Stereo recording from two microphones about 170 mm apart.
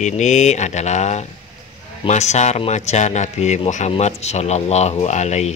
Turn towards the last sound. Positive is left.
turn(degrees=40)  # may be behind; listen again after turning